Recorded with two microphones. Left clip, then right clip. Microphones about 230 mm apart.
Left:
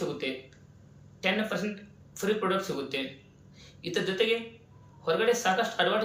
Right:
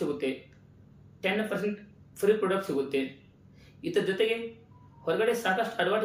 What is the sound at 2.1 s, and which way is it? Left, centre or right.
Speech, centre.